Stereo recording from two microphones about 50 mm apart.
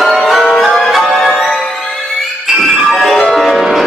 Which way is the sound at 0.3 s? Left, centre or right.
Centre.